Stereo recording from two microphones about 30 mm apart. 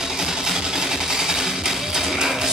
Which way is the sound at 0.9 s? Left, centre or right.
Centre.